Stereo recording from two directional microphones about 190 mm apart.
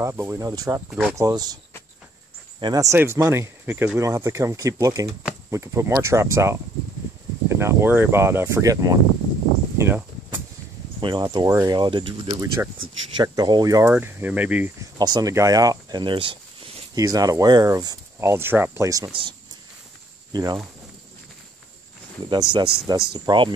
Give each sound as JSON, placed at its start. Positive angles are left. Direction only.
{"t": 0.0, "sound": "speech", "side_deg": -15}
{"t": 0.8, "sound": "speech", "side_deg": 0}
{"t": 1.1, "sound": "speech", "side_deg": -20}
{"t": 2.6, "sound": "speech", "side_deg": -20}
{"t": 11.0, "sound": "speech", "side_deg": -25}
{"t": 15.0, "sound": "speech", "side_deg": -20}
{"t": 20.3, "sound": "speech", "side_deg": -20}
{"t": 22.3, "sound": "speech", "side_deg": -25}